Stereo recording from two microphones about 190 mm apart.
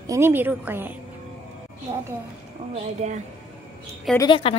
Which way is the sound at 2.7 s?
35° right (ahead or behind).